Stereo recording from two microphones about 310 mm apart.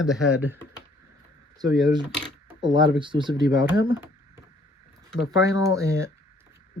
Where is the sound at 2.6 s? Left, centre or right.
Centre.